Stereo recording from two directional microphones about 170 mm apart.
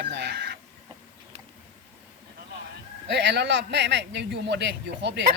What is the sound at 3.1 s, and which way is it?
A man's voice, 90° right.